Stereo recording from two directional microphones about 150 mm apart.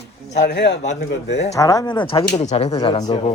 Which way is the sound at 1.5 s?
25° left (ahead or behind).